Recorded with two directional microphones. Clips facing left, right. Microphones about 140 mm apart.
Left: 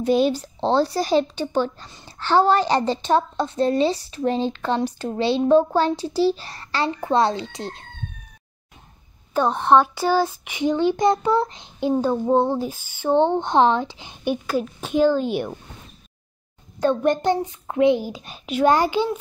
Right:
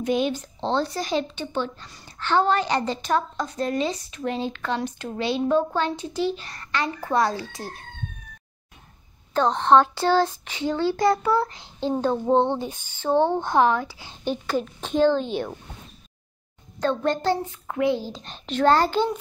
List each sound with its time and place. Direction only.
0.0 s a woman's voice: 35° left (ahead or behind)
1.9 s a woman's voice: 25° left (ahead or behind)
9.3 s speech: 10° left (ahead or behind)
12.0 s speech: 10° left (ahead or behind)
16.8 s speech: 15° left (ahead or behind)